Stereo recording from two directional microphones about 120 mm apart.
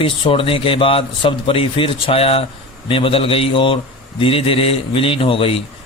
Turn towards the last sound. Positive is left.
turn(degrees=50)  # may be behind; listen again after turning